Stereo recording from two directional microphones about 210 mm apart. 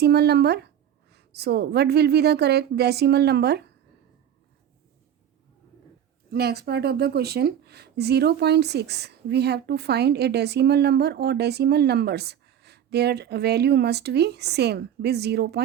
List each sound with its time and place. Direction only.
0.0 s speech: 50° right (ahead or behind)
6.3 s speech: 50° right (ahead or behind)